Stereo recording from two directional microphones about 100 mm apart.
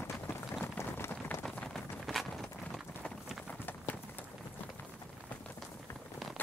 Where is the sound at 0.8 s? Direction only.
25° left (ahead or behind).